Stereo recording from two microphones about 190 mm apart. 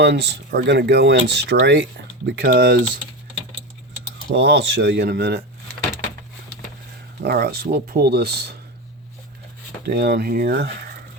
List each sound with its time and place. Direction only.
0.0 s speech: 65° right (ahead or behind)
4.3 s speech: 65° right (ahead or behind)
7.2 s speech: 55° right (ahead or behind)
9.8 s speech: 60° right (ahead or behind)